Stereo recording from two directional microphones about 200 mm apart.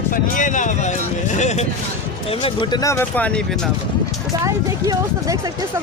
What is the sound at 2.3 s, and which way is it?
Speech, 25° left (ahead or behind).